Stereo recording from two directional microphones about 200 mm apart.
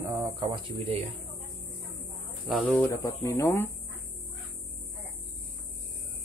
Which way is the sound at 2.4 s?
Centre (ahead or behind).